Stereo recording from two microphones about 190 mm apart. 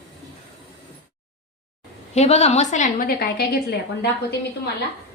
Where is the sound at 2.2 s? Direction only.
35° left (ahead or behind); by 3.6 s 55° left (ahead or behind).